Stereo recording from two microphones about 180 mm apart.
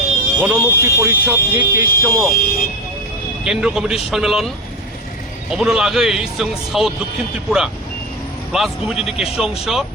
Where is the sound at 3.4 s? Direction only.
5° right (ahead or behind).